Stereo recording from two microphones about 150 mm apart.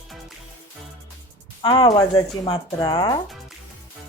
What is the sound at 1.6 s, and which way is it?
Speech, 30° left (ahead or behind).